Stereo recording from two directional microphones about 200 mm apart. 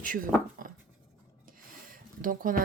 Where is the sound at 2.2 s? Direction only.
40° right (ahead or behind).